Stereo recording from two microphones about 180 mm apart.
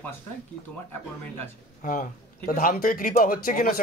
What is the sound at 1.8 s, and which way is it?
A man's voice, 45° left (ahead or behind).